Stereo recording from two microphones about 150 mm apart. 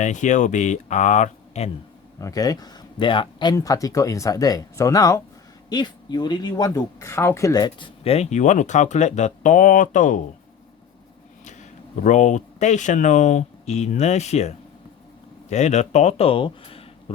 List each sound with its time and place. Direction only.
0.0 s speech: 55° left (ahead or behind)
2.1 s speech: 25° left (ahead or behind)
8.0 s speech: 45° left (ahead or behind)
12.0 s speech: 55° left (ahead or behind); by 16.8 s 40° left (ahead or behind)